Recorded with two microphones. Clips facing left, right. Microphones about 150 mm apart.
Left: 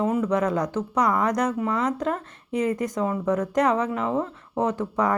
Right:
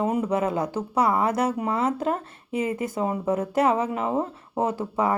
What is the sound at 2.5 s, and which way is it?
Speech, 5° right (ahead or behind).